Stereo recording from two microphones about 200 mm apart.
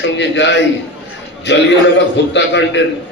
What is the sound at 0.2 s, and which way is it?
Speech, 65° left (ahead or behind).